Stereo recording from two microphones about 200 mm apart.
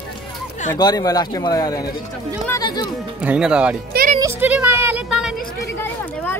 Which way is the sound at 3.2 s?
5° right (ahead or behind).